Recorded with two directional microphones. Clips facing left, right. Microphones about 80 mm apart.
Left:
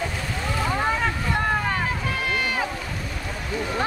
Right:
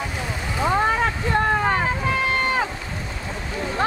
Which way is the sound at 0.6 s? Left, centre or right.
Right.